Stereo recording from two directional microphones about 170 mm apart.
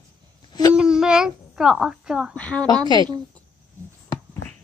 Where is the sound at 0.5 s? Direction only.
25° left (ahead or behind).